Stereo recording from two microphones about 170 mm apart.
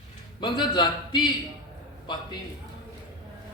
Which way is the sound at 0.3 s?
25° left (ahead or behind).